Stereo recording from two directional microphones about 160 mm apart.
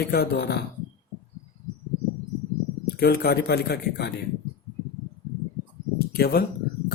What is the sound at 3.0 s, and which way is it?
Speech, 75° left (ahead or behind).